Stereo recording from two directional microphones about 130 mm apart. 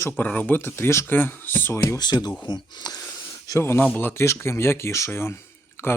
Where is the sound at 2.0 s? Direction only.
35° left (ahead or behind).